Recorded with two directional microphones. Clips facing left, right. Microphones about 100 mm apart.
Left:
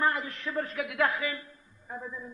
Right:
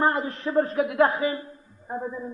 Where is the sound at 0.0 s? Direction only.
35° right (ahead or behind).